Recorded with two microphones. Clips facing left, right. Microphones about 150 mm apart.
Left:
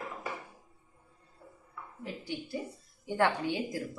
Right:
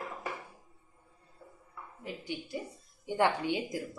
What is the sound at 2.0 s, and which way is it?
A woman's voice, 15° right (ahead or behind).